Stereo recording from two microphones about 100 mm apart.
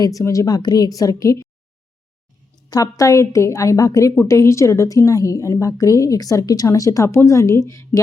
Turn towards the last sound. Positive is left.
turn(degrees=30)  # may be behind; listen again after turning